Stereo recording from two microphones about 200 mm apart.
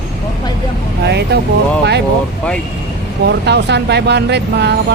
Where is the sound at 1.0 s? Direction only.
60° right (ahead or behind).